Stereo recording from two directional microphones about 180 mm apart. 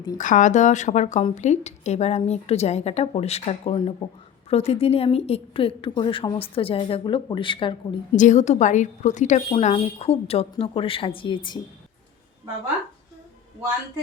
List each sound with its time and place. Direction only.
0.2 s a woman's voice: 45° left (ahead or behind); by 7.9 s 25° left (ahead or behind)
8.1 s a woman's voice: 45° left (ahead or behind); by 11.6 s 25° left (ahead or behind)